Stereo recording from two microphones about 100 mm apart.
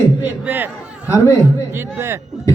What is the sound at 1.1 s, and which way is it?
Speech, 30° left (ahead or behind).